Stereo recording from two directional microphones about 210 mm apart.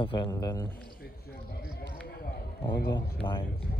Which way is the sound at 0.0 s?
25° left (ahead or behind).